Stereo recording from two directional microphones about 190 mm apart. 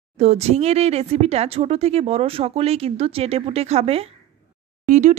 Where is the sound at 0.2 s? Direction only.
35° right (ahead or behind).